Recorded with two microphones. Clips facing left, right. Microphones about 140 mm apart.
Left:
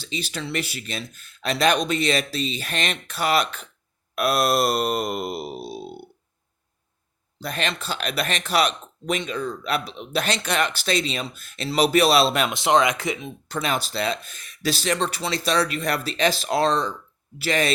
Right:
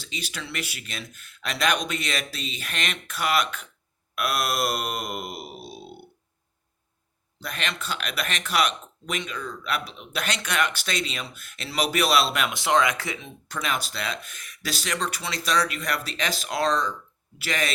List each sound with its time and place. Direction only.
0.0 s speech: 30° left (ahead or behind)
7.3 s speech: 35° left (ahead or behind)